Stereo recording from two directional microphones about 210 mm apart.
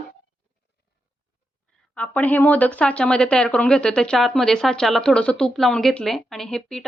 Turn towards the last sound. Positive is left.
turn(degrees=0)  # may be behind; listen again after turning